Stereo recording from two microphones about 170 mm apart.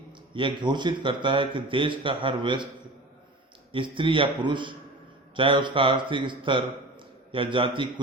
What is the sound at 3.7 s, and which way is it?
A man's voice, 30° right (ahead or behind).